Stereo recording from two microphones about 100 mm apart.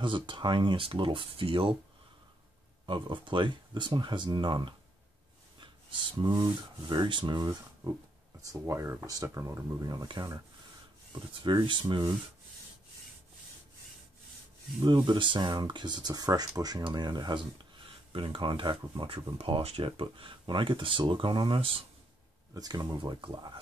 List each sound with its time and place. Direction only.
0.0 s speech: 55° right (ahead or behind)
2.9 s speech: 55° right (ahead or behind)
8.4 s speech: 30° right (ahead or behind)
9.8 s speech: 45° right (ahead or behind)
11.6 s speech: 55° right (ahead or behind)
14.9 s speech: 55° right (ahead or behind)
19.3 s speech: 75° right (ahead or behind)
22.5 s speech: 40° right (ahead or behind)
23.2 s speech: 55° right (ahead or behind)